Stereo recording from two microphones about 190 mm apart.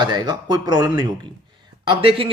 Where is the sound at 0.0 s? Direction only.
25° right (ahead or behind).